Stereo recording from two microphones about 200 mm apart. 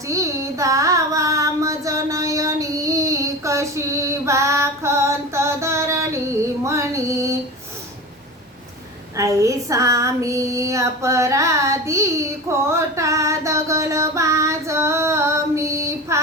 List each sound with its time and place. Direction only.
0.1 s child singing: 15° right (ahead or behind)
6.7 s female singing: 15° right (ahead or behind)
9.1 s female singing: 15° right (ahead or behind)